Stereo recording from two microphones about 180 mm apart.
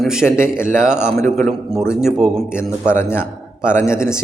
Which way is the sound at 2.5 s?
15° left (ahead or behind).